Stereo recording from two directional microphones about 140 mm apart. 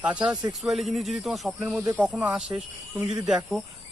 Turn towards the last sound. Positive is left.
turn(degrees=-5)  # may be behind; listen again after turning